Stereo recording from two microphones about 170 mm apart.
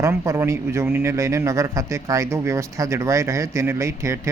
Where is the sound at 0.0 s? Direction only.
15° right (ahead or behind).